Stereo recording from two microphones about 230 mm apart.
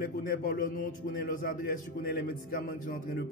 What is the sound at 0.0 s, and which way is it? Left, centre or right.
A man's voice, left.